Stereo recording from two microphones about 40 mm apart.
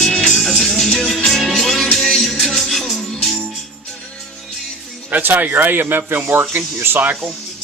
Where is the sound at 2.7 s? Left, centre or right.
Centre.